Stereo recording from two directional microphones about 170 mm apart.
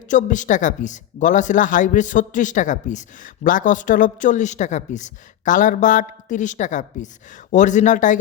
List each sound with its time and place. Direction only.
0.1 s speech: 45° left (ahead or behind)